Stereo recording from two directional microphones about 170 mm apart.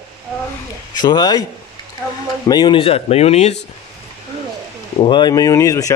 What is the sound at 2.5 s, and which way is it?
Speech, 25° left (ahead or behind).